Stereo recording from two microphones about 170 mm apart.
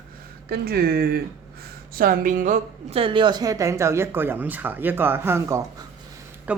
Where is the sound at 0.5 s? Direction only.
65° right (ahead or behind).